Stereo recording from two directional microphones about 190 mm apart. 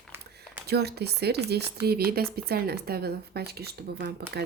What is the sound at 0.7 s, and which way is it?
Speech, 60° right (ahead or behind).